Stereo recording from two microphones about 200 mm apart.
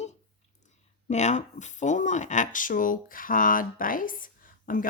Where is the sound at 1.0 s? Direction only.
35° left (ahead or behind).